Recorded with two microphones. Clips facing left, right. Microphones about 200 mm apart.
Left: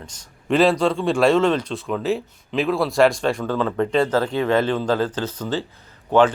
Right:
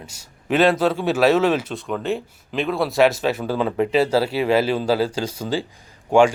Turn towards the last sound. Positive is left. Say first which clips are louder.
# right 1 dB
turn(degrees=-10)  # may be behind; listen again after turning